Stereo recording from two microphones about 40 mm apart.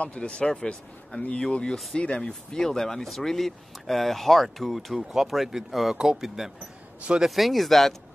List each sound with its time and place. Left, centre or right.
0.0 s speech: left
0.5 s speech: centre
2.6 s speech: centre